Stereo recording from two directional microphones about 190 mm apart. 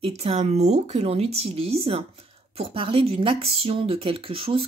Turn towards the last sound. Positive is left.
turn(degrees=-30)  # may be behind; listen again after turning